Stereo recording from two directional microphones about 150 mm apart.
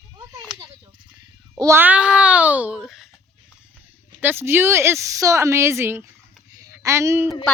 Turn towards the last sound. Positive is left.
turn(degrees=-15)  # may be behind; listen again after turning